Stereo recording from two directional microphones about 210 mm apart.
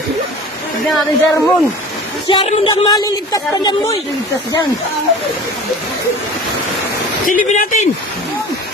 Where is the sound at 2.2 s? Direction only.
20° left (ahead or behind).